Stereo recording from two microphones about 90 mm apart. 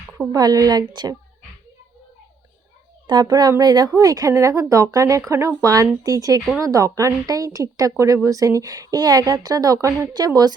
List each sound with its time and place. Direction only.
0.3 s a woman's voice: 45° right (ahead or behind)
3.1 s a woman's voice: 50° right (ahead or behind)
10.1 s a woman's voice: 45° right (ahead or behind)